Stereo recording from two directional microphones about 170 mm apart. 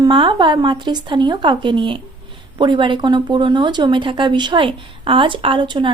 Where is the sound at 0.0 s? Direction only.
30° right (ahead or behind).